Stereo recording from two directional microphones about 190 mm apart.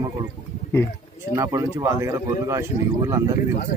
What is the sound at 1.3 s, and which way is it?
Speech, 15° right (ahead or behind).